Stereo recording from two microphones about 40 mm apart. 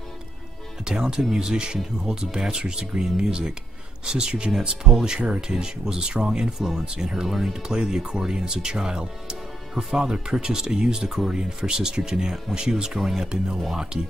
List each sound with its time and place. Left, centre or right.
0.8 s speech: centre